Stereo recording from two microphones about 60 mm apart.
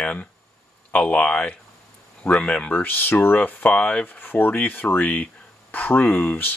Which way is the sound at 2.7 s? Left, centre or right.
Left.